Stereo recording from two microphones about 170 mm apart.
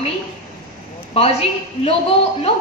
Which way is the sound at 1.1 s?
35° left (ahead or behind).